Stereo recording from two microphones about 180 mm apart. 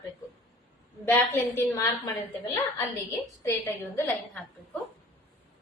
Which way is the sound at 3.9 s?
10° left (ahead or behind).